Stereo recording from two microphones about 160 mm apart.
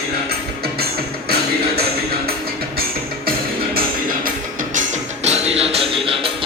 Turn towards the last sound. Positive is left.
turn(degrees=-35)  # may be behind; listen again after turning